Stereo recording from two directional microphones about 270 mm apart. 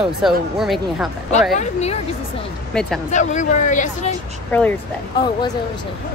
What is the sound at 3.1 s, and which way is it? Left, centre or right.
Speech, left.